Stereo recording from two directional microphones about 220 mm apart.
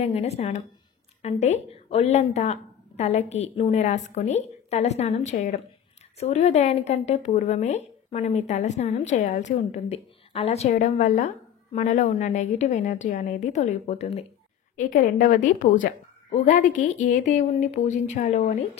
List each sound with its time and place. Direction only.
0.0 s a woman's voice: 30° left (ahead or behind)